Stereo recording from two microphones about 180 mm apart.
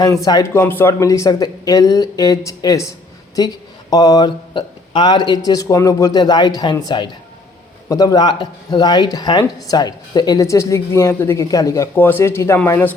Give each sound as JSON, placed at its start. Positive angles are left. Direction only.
{"t": 0.0, "sound": "speech", "side_deg": 20}